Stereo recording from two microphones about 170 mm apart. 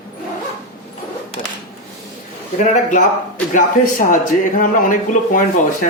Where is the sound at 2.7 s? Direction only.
45° left (ahead or behind).